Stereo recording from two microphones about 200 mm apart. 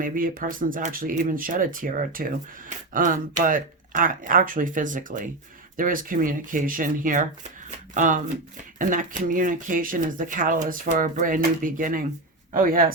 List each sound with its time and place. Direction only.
0.0 s speech: 45° right (ahead or behind)